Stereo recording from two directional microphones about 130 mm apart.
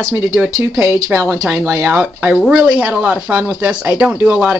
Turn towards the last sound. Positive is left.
turn(degrees=-10)  # may be behind; listen again after turning